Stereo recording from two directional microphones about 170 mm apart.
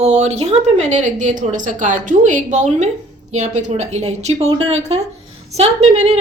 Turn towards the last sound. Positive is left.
turn(degrees=-40)  # may be behind; listen again after turning